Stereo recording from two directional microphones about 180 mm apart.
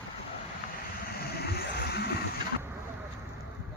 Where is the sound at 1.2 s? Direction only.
60° left (ahead or behind).